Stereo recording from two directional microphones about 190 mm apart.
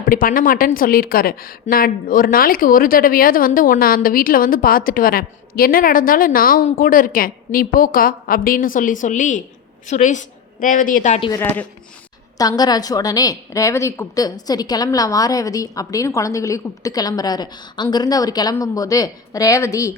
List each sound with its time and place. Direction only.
0.0 s a woman's voice: 50° left (ahead or behind)
11.3 s speech: 10° left (ahead or behind)
12.4 s a woman's voice: 20° left (ahead or behind)